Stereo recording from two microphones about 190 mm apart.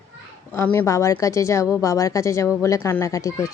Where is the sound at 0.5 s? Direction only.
10° left (ahead or behind).